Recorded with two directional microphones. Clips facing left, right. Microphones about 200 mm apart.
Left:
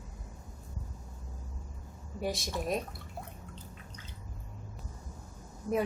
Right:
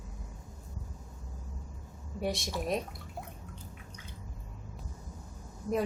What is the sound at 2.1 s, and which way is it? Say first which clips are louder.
Speech: right 1 dB; centre (ahead or behind).